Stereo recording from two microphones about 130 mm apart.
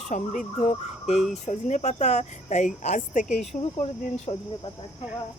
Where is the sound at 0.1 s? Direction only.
70° left (ahead or behind).